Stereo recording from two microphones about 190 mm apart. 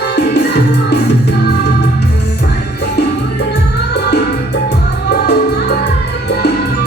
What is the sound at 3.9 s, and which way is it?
Music, 65° left (ahead or behind).